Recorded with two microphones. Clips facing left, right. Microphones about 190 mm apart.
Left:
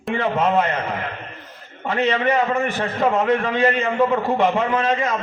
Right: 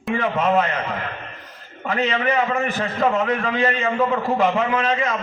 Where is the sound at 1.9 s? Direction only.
30° left (ahead or behind).